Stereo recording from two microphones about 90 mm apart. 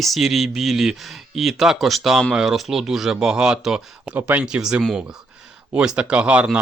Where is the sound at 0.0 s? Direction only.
Centre (ahead or behind).